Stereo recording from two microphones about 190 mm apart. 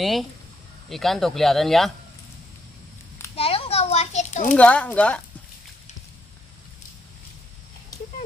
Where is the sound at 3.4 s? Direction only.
30° left (ahead or behind).